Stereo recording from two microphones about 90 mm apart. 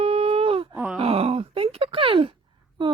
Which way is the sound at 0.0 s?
90° right.